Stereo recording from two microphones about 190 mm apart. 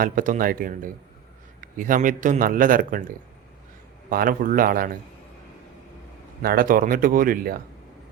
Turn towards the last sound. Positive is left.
turn(degrees=-50)  # may be behind; listen again after turning